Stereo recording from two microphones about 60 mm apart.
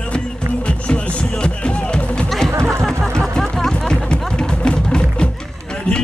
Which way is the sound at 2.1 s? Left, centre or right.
Centre.